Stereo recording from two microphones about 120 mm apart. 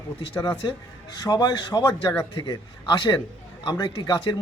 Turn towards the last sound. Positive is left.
turn(degrees=35)  # may be behind; listen again after turning